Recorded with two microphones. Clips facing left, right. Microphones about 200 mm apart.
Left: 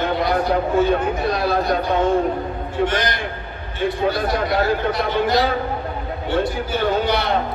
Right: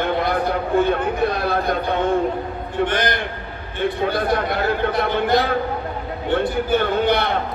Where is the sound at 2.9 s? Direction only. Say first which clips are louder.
Right 1 dB; 55° right (ahead or behind).